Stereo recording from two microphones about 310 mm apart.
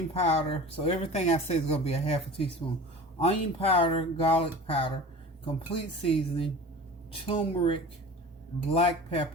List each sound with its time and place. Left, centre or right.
0.1 s speech: centre
3.2 s speech: centre